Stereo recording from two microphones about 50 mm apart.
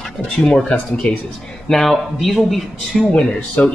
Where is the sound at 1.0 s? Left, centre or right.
Left.